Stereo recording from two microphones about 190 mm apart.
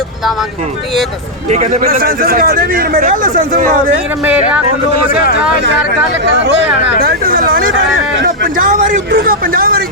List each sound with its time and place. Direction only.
1.5 s a man's voice: 35° right (ahead or behind)
1.8 s speech: 50° right (ahead or behind)
7.0 s speech: 50° right (ahead or behind)